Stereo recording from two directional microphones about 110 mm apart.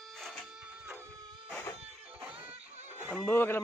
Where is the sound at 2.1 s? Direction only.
10° right (ahead or behind).